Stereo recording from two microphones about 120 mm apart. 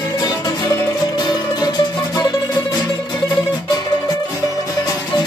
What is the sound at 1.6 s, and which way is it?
Music, 35° left (ahead or behind).